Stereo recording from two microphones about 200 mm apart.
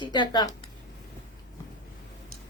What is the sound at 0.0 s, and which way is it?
Speech, 20° left (ahead or behind).